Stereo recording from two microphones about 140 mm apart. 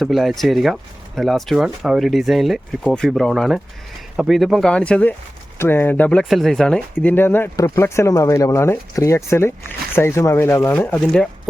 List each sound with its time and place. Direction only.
0.0 s speech: centre (ahead or behind)